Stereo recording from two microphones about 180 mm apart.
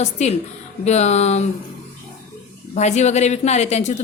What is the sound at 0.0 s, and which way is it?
A woman's voice, 40° left (ahead or behind).